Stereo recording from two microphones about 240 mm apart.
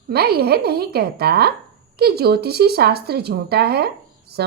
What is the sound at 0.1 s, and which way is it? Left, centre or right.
A woman's voice, right.